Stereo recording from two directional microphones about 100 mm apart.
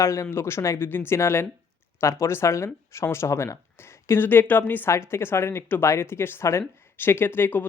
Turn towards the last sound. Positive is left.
turn(degrees=20)  # may be behind; listen again after turning